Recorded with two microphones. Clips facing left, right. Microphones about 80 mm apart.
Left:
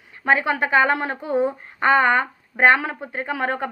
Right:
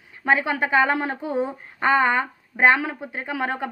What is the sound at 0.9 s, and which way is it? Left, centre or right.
Speech, left.